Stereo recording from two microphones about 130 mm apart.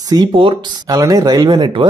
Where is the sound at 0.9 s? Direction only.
25° right (ahead or behind).